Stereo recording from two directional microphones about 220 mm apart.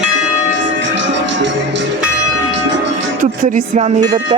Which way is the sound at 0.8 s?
55° right (ahead or behind).